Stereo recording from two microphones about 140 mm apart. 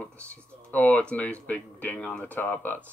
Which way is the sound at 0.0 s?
10° left (ahead or behind).